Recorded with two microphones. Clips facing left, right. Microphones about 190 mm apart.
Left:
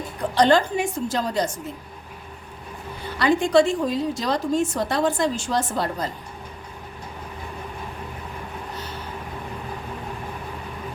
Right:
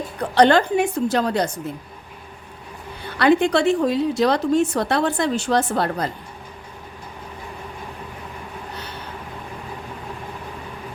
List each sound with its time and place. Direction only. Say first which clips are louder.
0.3 s a woman's voice: right 3 dB; 65° right (ahead or behind)
3.2 s a woman's voice: right 1 dB; 65° right (ahead or behind)